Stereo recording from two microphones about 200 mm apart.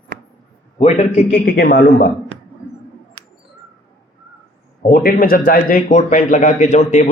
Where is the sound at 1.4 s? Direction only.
50° left (ahead or behind).